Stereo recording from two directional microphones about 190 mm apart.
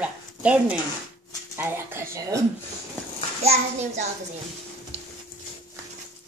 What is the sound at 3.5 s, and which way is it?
Speech, 35° right (ahead or behind).